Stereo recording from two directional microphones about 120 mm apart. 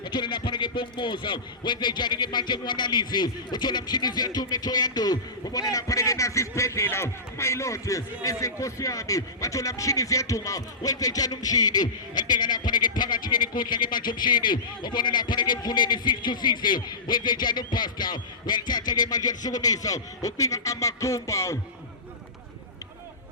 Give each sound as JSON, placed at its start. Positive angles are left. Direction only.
{"t": 0.0, "sound": "a man's voice", "side_deg": 40}